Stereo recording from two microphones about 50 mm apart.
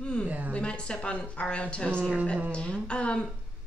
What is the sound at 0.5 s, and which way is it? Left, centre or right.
A woman's voice, left.